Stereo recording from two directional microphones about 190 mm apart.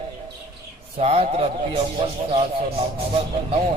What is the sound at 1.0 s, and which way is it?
A man's voice, 30° right (ahead or behind).